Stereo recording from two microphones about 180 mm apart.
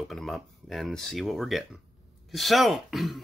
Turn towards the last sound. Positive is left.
turn(degrees=0)  # may be behind; listen again after turning